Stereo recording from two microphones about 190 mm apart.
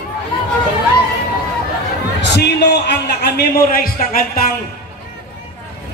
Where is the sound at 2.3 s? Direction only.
60° left (ahead or behind).